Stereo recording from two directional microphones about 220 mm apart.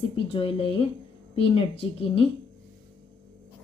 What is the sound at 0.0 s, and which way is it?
Speech, 25° left (ahead or behind).